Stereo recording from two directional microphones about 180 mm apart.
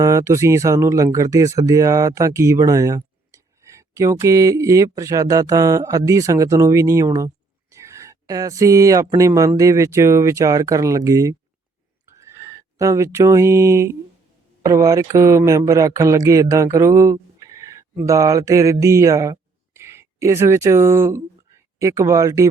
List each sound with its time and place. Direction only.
0.0 s speech: 15° right (ahead or behind)